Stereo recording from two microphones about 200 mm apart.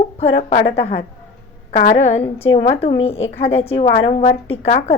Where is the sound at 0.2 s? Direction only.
30° left (ahead or behind).